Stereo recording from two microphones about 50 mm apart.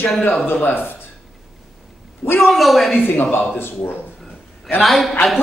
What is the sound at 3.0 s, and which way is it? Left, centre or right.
Speech, left.